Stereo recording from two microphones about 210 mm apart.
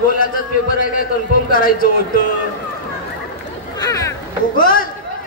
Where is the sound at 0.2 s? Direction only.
40° left (ahead or behind).